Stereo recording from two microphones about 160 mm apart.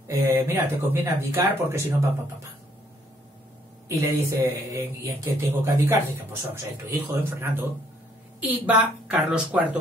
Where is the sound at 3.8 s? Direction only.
20° right (ahead or behind).